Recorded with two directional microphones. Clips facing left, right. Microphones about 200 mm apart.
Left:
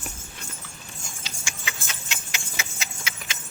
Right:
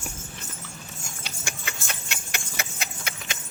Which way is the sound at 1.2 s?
55° right (ahead or behind).